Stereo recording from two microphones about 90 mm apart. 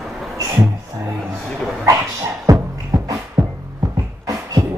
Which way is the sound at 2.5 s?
40° right (ahead or behind).